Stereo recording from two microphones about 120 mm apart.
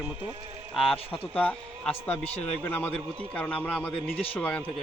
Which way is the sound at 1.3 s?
10° left (ahead or behind).